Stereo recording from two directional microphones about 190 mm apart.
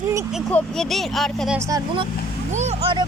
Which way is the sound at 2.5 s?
35° right (ahead or behind).